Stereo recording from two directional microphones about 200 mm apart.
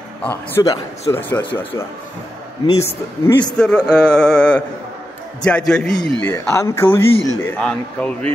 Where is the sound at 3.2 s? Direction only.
20° left (ahead or behind).